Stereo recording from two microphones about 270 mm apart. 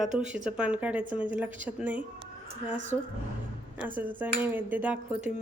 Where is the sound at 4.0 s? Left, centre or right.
Centre.